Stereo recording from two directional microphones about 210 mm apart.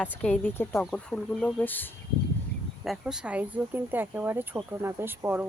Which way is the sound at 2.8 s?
5° right (ahead or behind).